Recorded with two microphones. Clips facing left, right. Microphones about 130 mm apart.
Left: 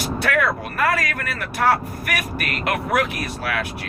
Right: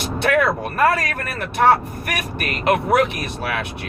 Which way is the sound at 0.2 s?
30° right (ahead or behind).